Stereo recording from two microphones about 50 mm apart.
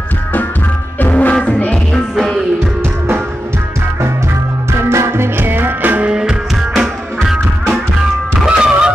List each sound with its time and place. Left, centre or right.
0.9 s music: left
4.6 s music: right
6.0 s music: centre
8.5 s music: centre